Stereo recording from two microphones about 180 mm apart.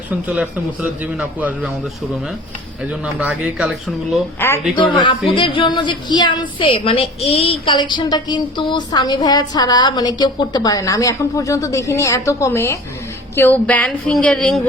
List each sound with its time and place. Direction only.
0.1 s a man's voice: 5° right (ahead or behind)
3.0 s speech: 5° right (ahead or behind)
4.4 s a woman's voice: 15° left (ahead or behind)
4.7 s a woman's voice: 25° left (ahead or behind); by 14.6 s 5° left (ahead or behind)